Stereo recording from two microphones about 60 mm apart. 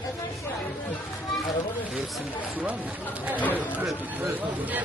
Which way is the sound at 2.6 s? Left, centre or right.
Right.